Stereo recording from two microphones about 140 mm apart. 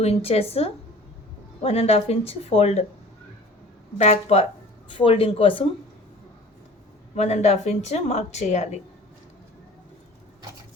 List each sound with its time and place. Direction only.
0.0 s a woman's voice: 45° left (ahead or behind)
3.9 s a woman's voice: 50° left (ahead or behind)
4.9 s speech: 35° left (ahead or behind)
7.2 s a woman's voice: 50° left (ahead or behind)